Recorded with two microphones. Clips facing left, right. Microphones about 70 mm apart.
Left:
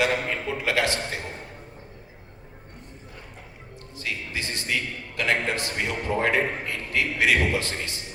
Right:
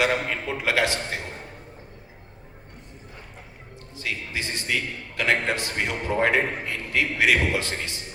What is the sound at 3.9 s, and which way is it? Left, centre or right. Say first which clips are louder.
Music: right 1 dB; right.